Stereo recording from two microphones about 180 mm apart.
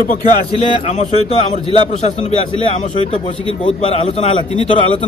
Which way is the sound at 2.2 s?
30° left (ahead or behind).